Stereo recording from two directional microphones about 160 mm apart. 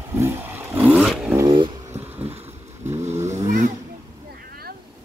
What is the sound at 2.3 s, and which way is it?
Vehicle, 40° right (ahead or behind).